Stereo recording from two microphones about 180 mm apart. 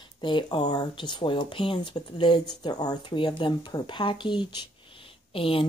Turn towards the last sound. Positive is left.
turn(degrees=30)  # may be behind; listen again after turning